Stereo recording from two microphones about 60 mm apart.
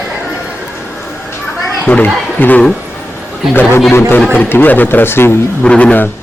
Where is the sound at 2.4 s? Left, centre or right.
Left.